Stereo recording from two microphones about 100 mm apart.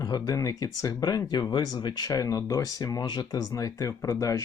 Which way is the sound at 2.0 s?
35° left (ahead or behind).